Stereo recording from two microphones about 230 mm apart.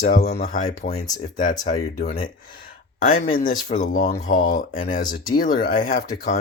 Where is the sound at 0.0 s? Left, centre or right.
Left.